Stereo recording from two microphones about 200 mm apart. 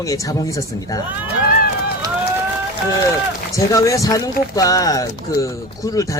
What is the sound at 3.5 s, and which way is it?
Speech, 15° left (ahead or behind).